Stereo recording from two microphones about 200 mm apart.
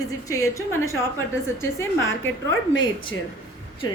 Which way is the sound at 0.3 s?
15° left (ahead or behind).